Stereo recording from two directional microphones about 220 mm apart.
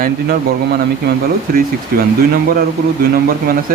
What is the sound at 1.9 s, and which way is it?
Speech, 40° right (ahead or behind).